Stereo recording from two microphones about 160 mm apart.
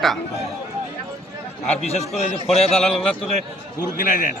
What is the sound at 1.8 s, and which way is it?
Speech, 45° left (ahead or behind).